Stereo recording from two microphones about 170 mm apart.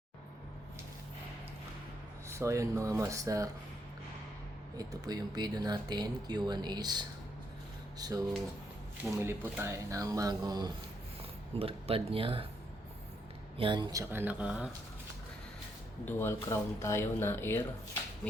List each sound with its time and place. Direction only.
2.3 s speech: 15° right (ahead or behind)
4.8 s speech: 20° right (ahead or behind)
9.2 s speech: 15° right (ahead or behind)
11.6 s speech: 35° right (ahead or behind)
13.6 s speech: 25° right (ahead or behind); by 14.7 s 5° right (ahead or behind)
16.0 s speech: 15° left (ahead or behind)